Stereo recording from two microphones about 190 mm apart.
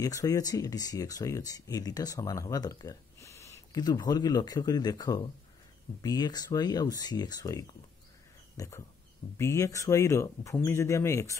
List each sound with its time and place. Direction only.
0.0 s speech: 20° left (ahead or behind)